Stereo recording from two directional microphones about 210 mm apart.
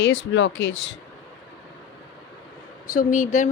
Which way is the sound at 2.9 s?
40° left (ahead or behind).